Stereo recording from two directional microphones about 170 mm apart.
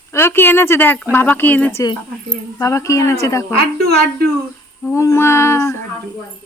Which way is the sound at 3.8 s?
70° right (ahead or behind).